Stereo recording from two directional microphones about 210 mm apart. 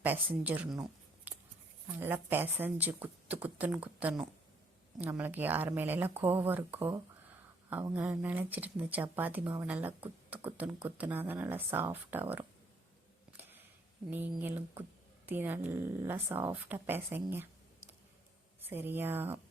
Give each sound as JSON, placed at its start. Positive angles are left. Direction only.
{"t": 0.0, "sound": "speech", "side_deg": -10}
{"t": 1.3, "sound": "a sound", "side_deg": -10}
{"t": 2.0, "sound": "speech", "side_deg": -10}
{"t": 13.3, "sound": "a sound", "side_deg": -10}
{"t": 14.1, "sound": "speech", "side_deg": -10}
{"t": 18.6, "sound": "speech", "side_deg": -10}